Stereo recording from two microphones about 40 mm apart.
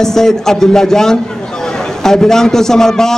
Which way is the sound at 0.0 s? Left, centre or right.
Centre.